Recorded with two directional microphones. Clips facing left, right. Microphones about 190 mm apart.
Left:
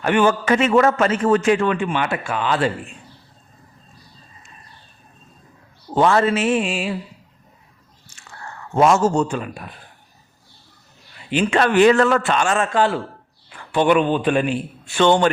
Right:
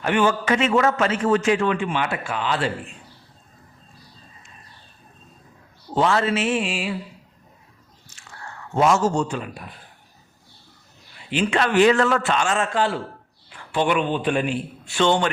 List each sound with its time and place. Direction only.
0.0 s a man's voice: 55° left (ahead or behind)
5.9 s a man's voice: 50° left (ahead or behind)
8.7 s a man's voice: 50° left (ahead or behind)
11.3 s a man's voice: 50° left (ahead or behind)